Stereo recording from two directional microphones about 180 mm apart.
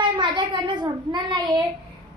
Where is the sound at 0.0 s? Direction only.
25° right (ahead or behind).